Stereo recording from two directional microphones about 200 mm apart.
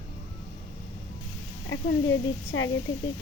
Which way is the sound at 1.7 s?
75° left (ahead or behind).